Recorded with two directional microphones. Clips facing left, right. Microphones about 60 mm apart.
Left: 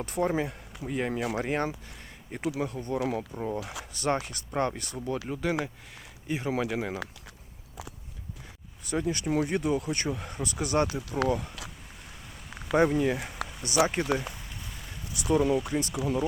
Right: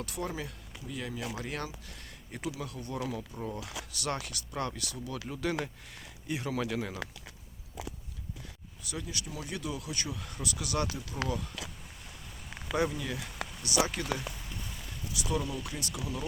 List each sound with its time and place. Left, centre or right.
0.0 s speech: left
5.4 s speech: centre
8.9 s speech: left
10.2 s speech: left
12.7 s speech: left
15.4 s speech: left